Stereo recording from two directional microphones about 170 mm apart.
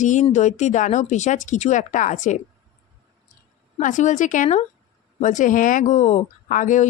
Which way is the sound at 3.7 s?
45° left (ahead or behind).